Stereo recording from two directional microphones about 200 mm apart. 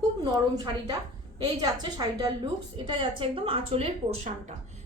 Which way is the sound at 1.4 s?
20° right (ahead or behind).